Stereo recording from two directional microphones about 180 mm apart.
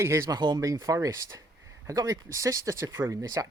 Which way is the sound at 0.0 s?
15° right (ahead or behind).